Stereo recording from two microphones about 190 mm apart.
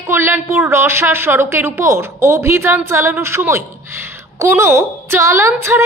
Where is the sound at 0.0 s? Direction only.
10° right (ahead or behind).